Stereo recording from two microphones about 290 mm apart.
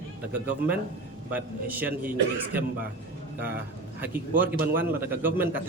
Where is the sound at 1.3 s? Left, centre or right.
Centre.